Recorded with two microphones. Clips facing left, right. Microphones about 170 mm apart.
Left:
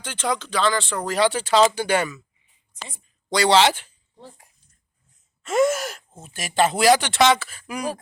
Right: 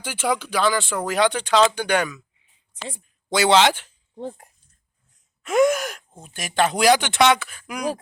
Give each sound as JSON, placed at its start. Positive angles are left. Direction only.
{"t": 0.0, "sound": "speech", "side_deg": -10}
{"t": 3.3, "sound": "speech", "side_deg": -5}
{"t": 3.6, "sound": "speech", "side_deg": 5}
{"t": 4.2, "sound": "speech", "side_deg": -50}
{"t": 5.5, "sound": "speech", "side_deg": 5}